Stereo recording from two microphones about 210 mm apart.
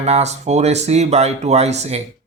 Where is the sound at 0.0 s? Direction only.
30° right (ahead or behind).